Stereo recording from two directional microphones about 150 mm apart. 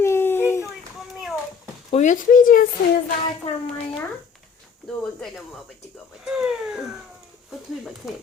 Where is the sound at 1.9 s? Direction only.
55° left (ahead or behind).